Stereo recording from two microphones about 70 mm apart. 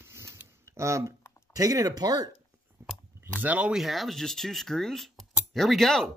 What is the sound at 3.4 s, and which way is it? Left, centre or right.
Speech, right.